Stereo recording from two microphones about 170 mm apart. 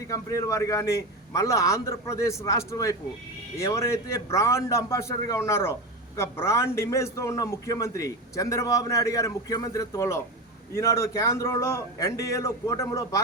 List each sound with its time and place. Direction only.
0.1 s a man's voice: 20° left (ahead or behind)